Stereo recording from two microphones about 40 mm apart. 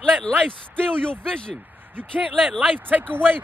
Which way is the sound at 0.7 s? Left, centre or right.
Left.